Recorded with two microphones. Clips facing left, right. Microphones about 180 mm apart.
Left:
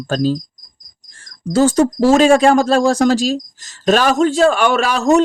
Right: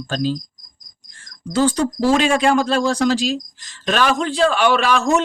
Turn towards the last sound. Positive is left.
turn(degrees=40)  # may be behind; listen again after turning